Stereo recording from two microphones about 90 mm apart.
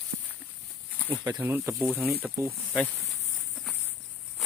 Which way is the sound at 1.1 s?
45° right (ahead or behind).